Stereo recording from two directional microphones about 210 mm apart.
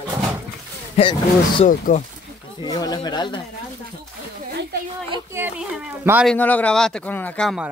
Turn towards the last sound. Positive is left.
turn(degrees=0)  # may be behind; listen again after turning